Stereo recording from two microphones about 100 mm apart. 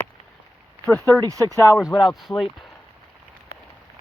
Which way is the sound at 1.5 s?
30° left (ahead or behind).